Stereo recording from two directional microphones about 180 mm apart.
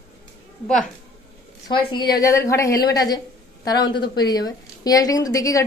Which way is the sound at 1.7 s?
25° left (ahead or behind).